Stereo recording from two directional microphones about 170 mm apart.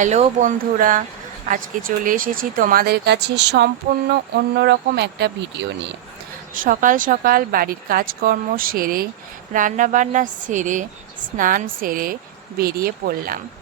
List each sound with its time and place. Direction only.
0.0 s a woman's voice: 45° right (ahead or behind); by 5.9 s 90° right
6.5 s a woman's voice: 55° right (ahead or behind)